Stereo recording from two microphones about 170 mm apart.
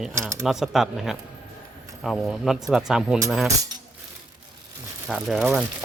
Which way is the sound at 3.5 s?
20° right (ahead or behind).